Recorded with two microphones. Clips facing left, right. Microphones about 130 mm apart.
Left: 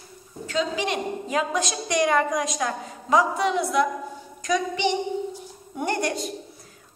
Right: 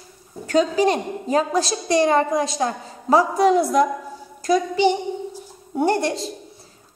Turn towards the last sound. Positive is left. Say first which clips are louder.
# right 5 dB
turn(degrees=-30)  # may be behind; listen again after turning